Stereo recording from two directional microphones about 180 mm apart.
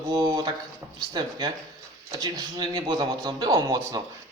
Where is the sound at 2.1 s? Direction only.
20° right (ahead or behind).